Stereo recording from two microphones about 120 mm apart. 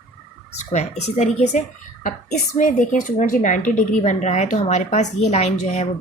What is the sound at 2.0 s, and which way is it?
Speech, 90° left.